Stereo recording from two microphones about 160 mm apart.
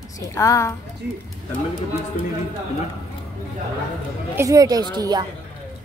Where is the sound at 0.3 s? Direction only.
20° left (ahead or behind).